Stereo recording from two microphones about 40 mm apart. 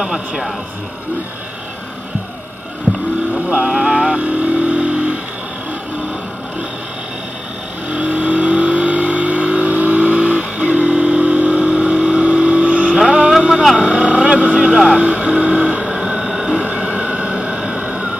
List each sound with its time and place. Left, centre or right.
2.9 s boat: left
3.6 s hum: centre
4.2 s vehicle: right
7.9 s vehicle: right
11.7 s vehicle: right
13.6 s vehicle: centre
13.8 s vehicle: right
15.0 s music: right
16.0 s a sound: centre
16.5 s a sound: right